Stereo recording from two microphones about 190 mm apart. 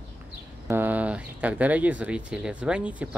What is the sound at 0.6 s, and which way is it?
Speech, 10° right (ahead or behind).